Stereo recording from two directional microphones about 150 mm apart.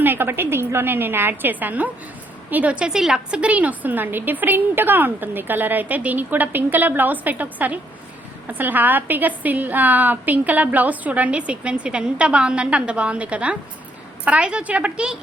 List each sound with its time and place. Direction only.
0.0 s a woman's voice: 15° right (ahead or behind)